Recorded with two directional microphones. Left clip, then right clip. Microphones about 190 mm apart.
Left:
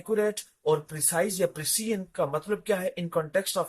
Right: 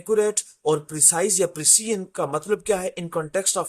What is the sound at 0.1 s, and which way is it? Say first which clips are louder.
Speech: right 6 dB; 60° right (ahead or behind).